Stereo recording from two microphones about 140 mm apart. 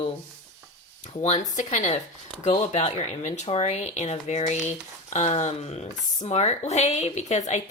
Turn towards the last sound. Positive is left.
turn(degrees=55)  # may be behind; listen again after turning